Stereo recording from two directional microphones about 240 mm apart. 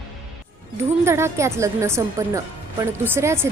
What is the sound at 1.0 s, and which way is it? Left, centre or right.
A woman's voice, centre.